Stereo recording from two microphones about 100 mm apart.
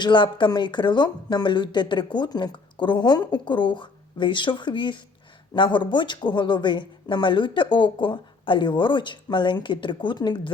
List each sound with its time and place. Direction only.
0.0 s speech: 50° left (ahead or behind)